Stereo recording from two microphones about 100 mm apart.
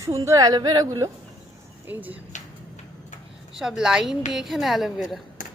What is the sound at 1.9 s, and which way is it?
Speech, 15° right (ahead or behind).